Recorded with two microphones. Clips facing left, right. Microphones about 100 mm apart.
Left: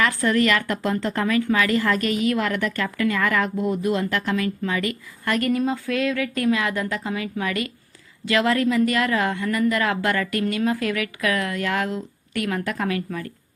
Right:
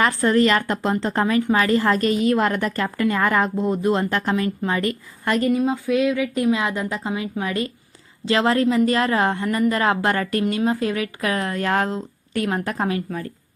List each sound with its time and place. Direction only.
0.0 s a woman's voice: 30° right (ahead or behind)
5.6 s a woman's voice: 15° right (ahead or behind)